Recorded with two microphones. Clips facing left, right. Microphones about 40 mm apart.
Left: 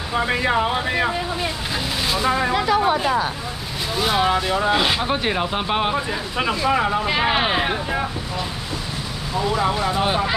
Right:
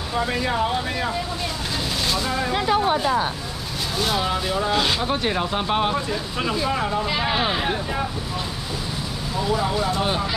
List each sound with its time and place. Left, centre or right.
0.1 s speech: left
4.0 s speech: centre
9.6 s speech: left